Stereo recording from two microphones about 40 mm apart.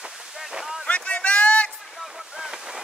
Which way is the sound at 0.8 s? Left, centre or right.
Left.